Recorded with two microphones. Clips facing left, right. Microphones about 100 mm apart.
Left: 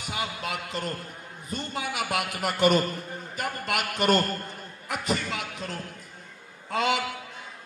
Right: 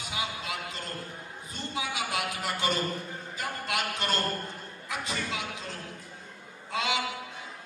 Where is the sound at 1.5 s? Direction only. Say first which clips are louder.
Left 3 dB; 55° left (ahead or behind).